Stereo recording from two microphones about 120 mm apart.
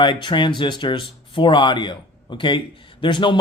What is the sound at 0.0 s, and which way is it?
Speech, 40° left (ahead or behind).